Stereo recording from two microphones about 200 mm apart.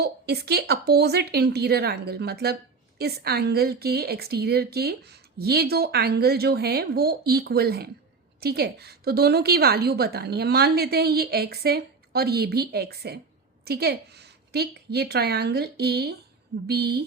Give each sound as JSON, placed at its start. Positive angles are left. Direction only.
{"t": 0.0, "sound": "speech", "side_deg": -55}